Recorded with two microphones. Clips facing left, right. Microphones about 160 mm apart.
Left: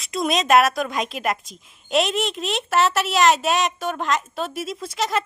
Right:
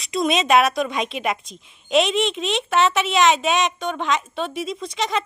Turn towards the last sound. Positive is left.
turn(degrees=5)  # may be behind; listen again after turning